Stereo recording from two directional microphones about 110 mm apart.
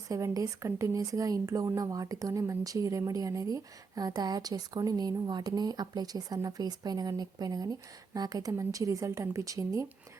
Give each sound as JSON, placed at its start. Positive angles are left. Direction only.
{"t": 0.1, "sound": "speech", "side_deg": -30}